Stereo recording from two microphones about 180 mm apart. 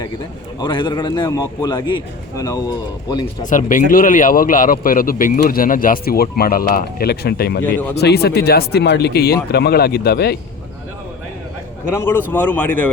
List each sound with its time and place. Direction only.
0.6 s a man's voice: 25° left (ahead or behind)
3.4 s speech: 45° left (ahead or behind); by 10.3 s 60° left (ahead or behind)
11.9 s speech: 15° left (ahead or behind)